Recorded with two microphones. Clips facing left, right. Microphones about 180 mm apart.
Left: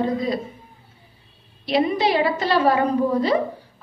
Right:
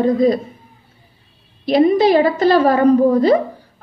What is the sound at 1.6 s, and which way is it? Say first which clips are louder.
A woman's voice: right 8 dB; 45° right (ahead or behind).